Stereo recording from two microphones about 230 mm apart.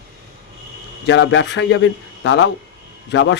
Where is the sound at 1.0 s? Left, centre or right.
Left.